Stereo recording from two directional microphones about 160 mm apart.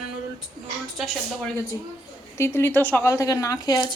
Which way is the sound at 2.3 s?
15° left (ahead or behind).